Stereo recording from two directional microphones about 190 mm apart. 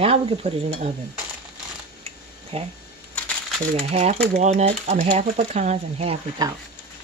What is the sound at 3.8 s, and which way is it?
Speech, 35° right (ahead or behind).